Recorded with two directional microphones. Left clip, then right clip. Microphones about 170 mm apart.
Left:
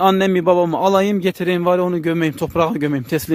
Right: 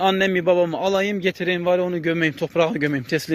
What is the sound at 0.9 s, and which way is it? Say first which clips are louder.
A man's voice: left 5 dB; 65° left (ahead or behind).